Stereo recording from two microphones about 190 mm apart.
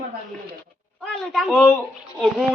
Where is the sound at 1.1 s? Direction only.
Centre (ahead or behind).